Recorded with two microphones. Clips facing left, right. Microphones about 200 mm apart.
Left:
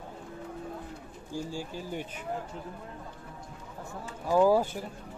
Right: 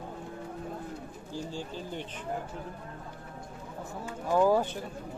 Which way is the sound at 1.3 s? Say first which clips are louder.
Left 2 dB; 10° left (ahead or behind).